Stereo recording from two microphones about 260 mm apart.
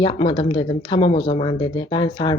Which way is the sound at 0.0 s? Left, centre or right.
Centre.